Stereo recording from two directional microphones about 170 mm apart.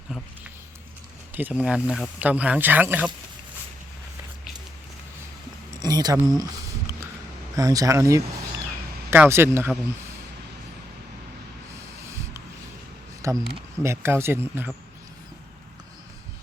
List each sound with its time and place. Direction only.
1.3 s speech: 10° right (ahead or behind)
5.8 s a sound: 25° right (ahead or behind)
7.5 s speech: 20° right (ahead or behind)
13.2 s speech: 20° right (ahead or behind)